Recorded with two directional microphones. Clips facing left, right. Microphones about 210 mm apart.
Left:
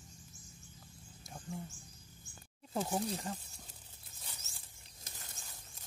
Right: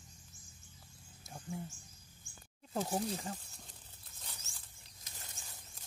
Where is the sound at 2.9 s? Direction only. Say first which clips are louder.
Even; 5° right (ahead or behind).